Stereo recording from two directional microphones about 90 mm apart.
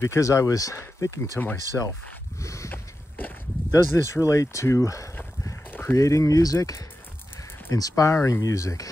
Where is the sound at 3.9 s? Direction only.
30° left (ahead or behind).